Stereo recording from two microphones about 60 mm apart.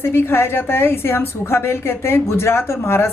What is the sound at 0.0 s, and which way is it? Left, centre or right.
A woman's voice, left.